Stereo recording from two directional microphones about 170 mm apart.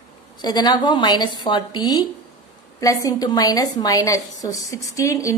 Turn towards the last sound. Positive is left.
turn(degrees=20)  # may be behind; listen again after turning